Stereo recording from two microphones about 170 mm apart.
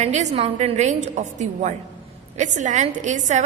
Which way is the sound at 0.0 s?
45° right (ahead or behind).